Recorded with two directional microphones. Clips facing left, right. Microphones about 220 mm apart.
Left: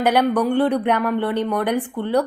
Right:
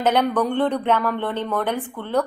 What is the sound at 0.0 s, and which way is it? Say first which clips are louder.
A woman's voice: left 2 dB; 10° left (ahead or behind).